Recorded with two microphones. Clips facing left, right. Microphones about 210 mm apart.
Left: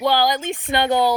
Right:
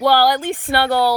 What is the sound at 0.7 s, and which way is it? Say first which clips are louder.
Speech: right 1 dB; 15° left (ahead or behind).